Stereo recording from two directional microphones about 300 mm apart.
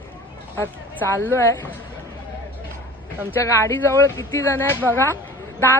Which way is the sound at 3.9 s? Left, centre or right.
Centre.